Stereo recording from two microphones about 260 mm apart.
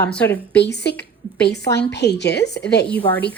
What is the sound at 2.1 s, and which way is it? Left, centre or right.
Speech, left.